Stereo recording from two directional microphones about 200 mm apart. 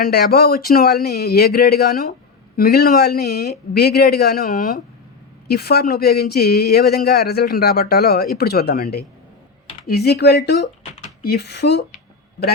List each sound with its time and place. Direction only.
0.0 s speech: 50° left (ahead or behind)